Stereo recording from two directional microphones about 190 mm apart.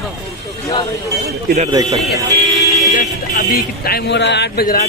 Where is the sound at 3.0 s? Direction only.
50° left (ahead or behind).